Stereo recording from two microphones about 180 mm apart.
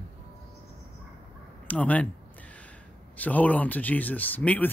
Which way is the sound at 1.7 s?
10° left (ahead or behind).